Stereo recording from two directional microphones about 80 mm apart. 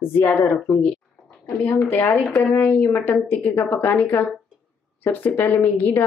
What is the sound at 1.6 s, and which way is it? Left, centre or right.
A woman's voice, left.